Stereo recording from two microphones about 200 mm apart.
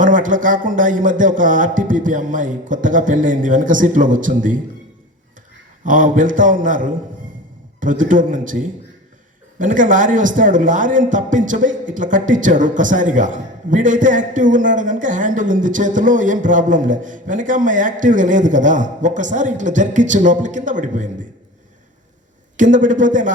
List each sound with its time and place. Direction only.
0.0 s a man's voice: 40° right (ahead or behind)
5.8 s a man's voice: 40° right (ahead or behind)
22.5 s a man's voice: 40° right (ahead or behind)